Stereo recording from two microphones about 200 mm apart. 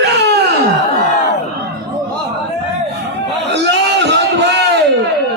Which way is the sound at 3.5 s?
60° right (ahead or behind).